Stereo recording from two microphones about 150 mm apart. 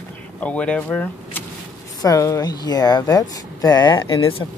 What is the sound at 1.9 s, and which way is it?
Speech, 25° left (ahead or behind).